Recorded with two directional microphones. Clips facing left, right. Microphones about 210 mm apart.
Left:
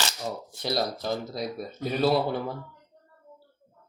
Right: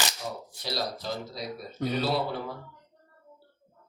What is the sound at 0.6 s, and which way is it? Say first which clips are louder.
Speech: left 5 dB; 50° left (ahead or behind).